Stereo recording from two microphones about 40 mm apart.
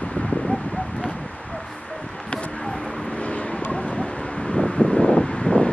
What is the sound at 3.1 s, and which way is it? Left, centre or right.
Vehicle, left.